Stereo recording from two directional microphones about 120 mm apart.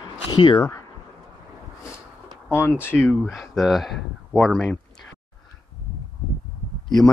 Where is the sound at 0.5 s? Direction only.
25° left (ahead or behind).